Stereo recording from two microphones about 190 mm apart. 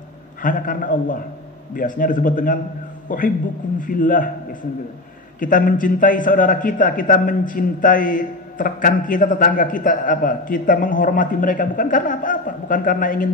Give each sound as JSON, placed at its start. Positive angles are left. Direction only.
{"t": 0.4, "sound": "a man's voice", "side_deg": 45}